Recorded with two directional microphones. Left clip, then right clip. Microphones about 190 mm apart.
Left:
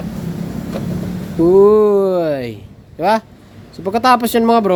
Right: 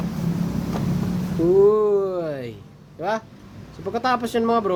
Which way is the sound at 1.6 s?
45° left (ahead or behind).